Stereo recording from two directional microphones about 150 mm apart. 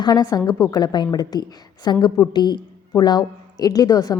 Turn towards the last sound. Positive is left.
turn(degrees=25)  # may be behind; listen again after turning